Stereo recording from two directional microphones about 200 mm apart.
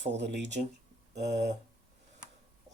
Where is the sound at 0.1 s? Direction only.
60° right (ahead or behind).